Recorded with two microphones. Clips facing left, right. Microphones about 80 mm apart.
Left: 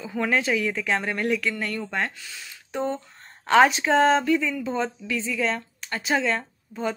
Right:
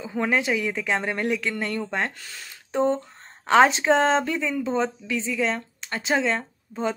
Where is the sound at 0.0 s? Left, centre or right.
Right.